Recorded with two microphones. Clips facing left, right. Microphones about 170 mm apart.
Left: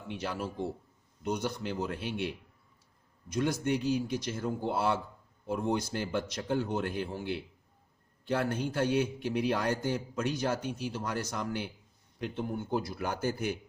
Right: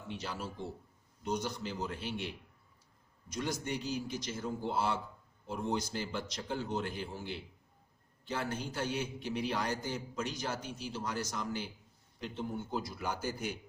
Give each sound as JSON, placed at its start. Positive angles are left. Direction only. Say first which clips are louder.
{"t": 0.1, "sound": "a man's voice", "louder": "left 5 dB", "side_deg": 60}
{"t": 3.3, "sound": "a man's voice", "louder": "left 7 dB", "side_deg": 55}